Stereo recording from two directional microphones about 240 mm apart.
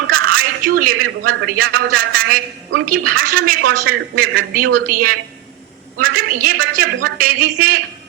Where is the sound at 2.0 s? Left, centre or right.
Right.